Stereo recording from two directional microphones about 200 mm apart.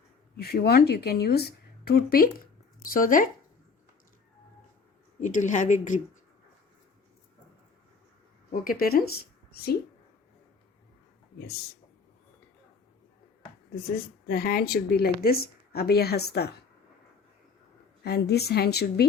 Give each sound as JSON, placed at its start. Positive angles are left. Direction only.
{"t": 0.4, "sound": "a woman's voice", "side_deg": 50}
{"t": 5.2, "sound": "a woman's voice", "side_deg": 40}
{"t": 8.6, "sound": "speech", "side_deg": 50}
{"t": 11.3, "sound": "speech", "side_deg": 50}
{"t": 13.7, "sound": "a woman's voice", "side_deg": 50}
{"t": 18.0, "sound": "a woman's voice", "side_deg": 55}